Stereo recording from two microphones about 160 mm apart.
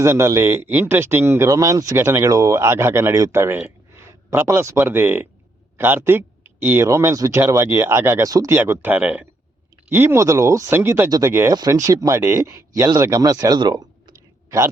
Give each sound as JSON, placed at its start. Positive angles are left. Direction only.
{"t": 0.0, "sound": "speech", "side_deg": -15}